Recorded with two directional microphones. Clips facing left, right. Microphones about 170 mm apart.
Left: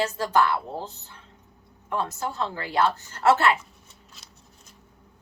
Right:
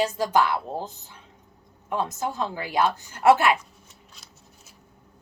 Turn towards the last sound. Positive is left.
turn(degrees=0)  # may be behind; listen again after turning